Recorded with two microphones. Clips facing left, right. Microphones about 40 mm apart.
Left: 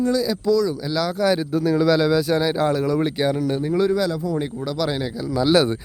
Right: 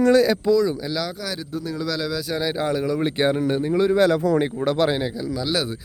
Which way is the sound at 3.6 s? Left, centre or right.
Centre.